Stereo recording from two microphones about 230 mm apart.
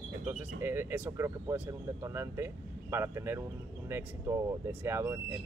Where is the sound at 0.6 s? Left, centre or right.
Centre.